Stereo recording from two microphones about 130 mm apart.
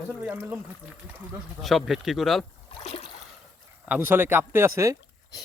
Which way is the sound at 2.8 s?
50° left (ahead or behind).